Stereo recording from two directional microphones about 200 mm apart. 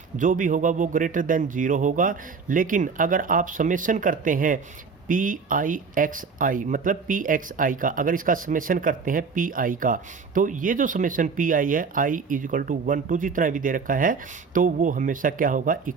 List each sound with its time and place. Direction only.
0.2 s a man's voice: 40° right (ahead or behind)